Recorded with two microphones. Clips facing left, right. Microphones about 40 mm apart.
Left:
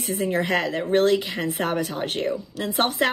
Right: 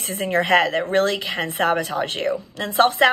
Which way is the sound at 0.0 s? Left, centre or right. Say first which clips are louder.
Right 2 dB; right.